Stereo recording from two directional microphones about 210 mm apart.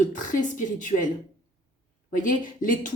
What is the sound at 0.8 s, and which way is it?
Speech, 40° left (ahead or behind).